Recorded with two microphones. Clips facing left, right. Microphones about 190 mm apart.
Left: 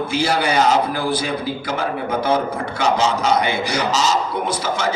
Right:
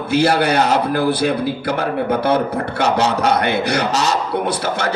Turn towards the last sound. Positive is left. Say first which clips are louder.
# right 2 dB
turn(degrees=-65)  # may be behind; listen again after turning